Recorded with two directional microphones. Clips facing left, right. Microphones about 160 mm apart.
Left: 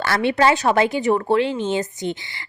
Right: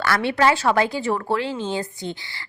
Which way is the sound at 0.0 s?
20° left (ahead or behind).